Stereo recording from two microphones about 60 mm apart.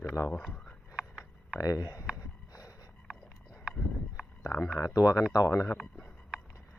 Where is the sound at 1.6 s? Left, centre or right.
Left.